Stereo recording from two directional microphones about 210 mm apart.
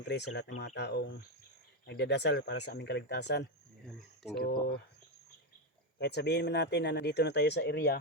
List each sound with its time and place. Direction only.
0.1 s speech: 50° left (ahead or behind)
6.0 s speech: 50° left (ahead or behind)